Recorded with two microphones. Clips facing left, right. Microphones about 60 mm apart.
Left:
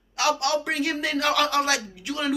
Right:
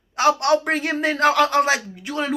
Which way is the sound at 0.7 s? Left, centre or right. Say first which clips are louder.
Right 4 dB; right.